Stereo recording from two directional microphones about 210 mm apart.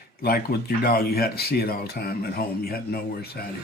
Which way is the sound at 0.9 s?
45° left (ahead or behind).